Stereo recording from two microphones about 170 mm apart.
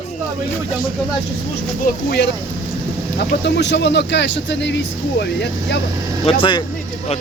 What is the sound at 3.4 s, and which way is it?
Speech, 90° left.